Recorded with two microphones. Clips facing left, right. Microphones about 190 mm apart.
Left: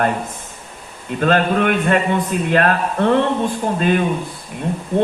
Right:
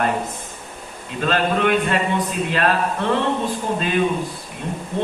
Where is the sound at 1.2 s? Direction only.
50° left (ahead or behind).